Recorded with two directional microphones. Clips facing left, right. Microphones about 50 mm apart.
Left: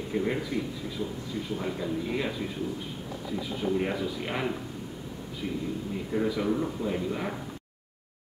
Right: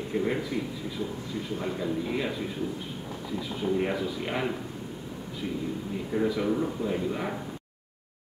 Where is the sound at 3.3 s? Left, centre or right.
Centre.